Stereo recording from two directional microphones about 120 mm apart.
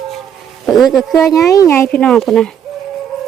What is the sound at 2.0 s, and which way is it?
Speech, 5° left (ahead or behind).